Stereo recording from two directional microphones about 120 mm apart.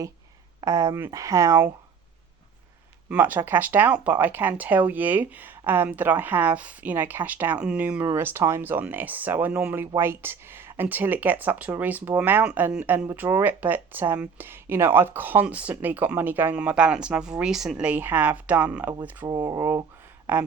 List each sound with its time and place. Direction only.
0.6 s speech: 25° right (ahead or behind)
3.1 s speech: 15° right (ahead or behind)
19.3 s speech: 35° right (ahead or behind)